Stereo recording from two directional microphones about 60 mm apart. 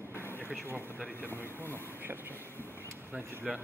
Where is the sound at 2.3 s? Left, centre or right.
Left.